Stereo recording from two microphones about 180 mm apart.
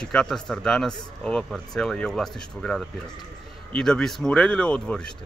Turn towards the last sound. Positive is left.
turn(degrees=5)  # may be behind; listen again after turning